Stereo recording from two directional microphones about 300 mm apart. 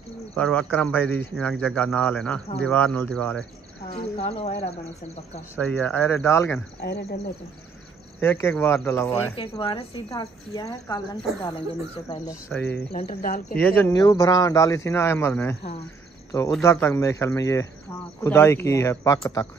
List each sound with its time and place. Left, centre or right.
0.3 s speech: centre
3.9 s speech: centre
5.7 s speech: centre
6.8 s speech: left
8.2 s speech: centre
12.9 s speech: left
13.5 s speech: centre